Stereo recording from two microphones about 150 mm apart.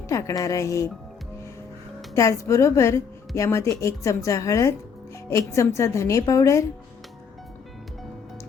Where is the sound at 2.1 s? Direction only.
20° left (ahead or behind).